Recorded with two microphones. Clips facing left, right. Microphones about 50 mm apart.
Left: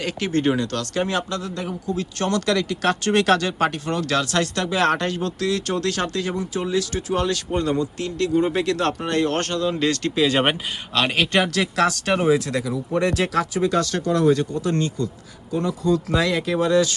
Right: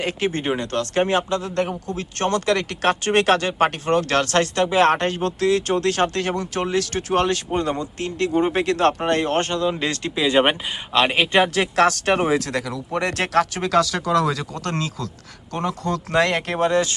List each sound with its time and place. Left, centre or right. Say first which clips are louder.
0.0 s speech: left 1 dB; right
1.5 s speech: right 3 dB; right
2.0 s speech: right 2 dB; right
7.5 s speech: left 1 dB; right
10.2 s speech: right 3 dB; centre
10.9 s speech: right 3 dB; right
11.6 s speech: right 3 dB; right
15.5 s speech: left 3 dB; right
16.0 s speech: right 1 dB; right